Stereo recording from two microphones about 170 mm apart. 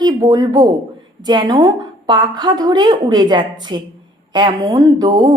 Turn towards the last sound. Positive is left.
turn(degrees=-20)  # may be behind; listen again after turning